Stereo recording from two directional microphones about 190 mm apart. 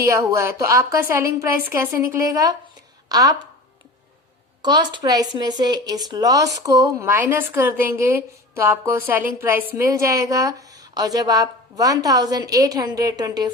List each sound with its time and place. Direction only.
0.0 s speech: 15° right (ahead or behind)
4.6 s a woman's voice: 20° right (ahead or behind)